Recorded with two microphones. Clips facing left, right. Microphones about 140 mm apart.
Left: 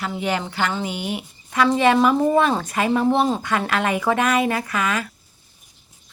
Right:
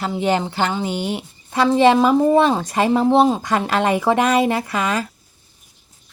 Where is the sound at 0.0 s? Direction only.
30° right (ahead or behind).